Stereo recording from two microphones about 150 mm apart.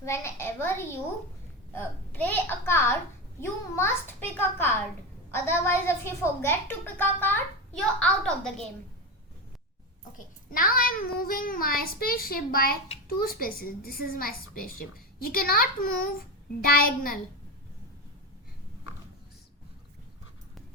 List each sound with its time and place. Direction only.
0.0 s a woman's voice: 20° left (ahead or behind)
10.2 s a woman's voice: 65° left (ahead or behind)